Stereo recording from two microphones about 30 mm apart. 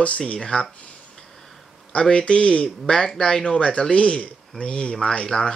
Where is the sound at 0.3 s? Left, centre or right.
Left.